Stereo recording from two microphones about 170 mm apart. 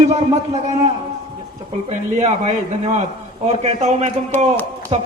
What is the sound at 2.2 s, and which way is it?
A woman's voice, 40° right (ahead or behind).